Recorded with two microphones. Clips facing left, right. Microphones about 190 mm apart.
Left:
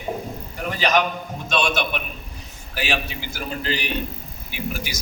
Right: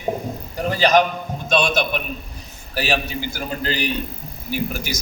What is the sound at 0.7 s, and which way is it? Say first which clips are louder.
A man's voice: right 4 dB; 35° right (ahead or behind).